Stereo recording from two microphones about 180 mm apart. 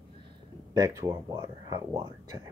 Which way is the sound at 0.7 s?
20° right (ahead or behind).